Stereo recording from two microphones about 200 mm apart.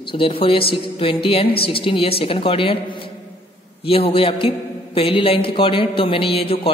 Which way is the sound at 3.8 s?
30° left (ahead or behind).